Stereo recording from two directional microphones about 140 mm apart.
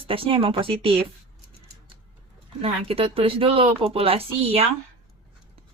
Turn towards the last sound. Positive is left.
turn(degrees=-45)  # may be behind; listen again after turning